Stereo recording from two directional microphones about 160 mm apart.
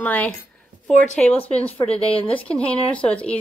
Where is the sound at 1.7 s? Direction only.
40° left (ahead or behind).